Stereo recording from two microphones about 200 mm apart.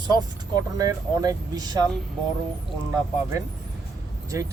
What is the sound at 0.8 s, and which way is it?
Speech, 20° right (ahead or behind).